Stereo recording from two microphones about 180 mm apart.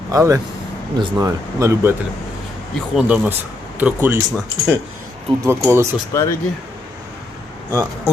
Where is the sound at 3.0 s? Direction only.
5° right (ahead or behind).